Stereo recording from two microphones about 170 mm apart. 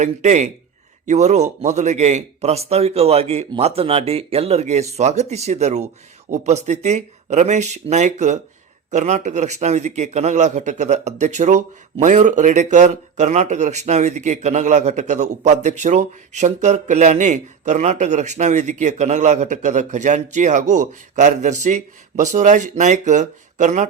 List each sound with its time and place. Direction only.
0.0 s a man's voice: 45° right (ahead or behind)